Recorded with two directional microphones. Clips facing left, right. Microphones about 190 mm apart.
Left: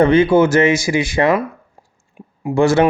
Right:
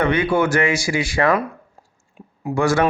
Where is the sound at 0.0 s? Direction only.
25° left (ahead or behind).